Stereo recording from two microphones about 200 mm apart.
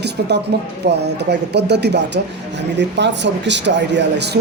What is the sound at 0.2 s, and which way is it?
Speech, 50° right (ahead or behind).